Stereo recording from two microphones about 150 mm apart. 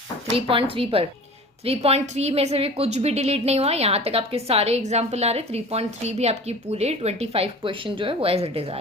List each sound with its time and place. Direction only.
0.3 s a woman's voice: 35° right (ahead or behind)